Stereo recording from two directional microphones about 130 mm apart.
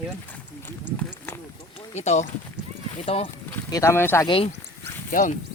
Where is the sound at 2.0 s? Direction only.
65° left (ahead or behind).